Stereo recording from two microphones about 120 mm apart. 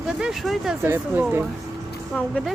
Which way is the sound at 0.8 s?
15° right (ahead or behind).